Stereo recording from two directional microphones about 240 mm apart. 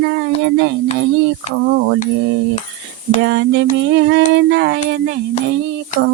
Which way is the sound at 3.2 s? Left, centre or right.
Right.